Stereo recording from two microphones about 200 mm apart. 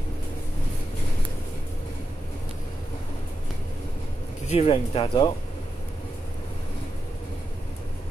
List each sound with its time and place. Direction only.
4.5 s speech: 30° left (ahead or behind)